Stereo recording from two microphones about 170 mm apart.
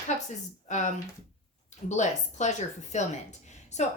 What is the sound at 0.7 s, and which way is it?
Speech, 45° left (ahead or behind).